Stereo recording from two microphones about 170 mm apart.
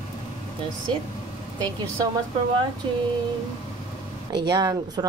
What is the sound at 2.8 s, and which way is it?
Female singing, 30° right (ahead or behind).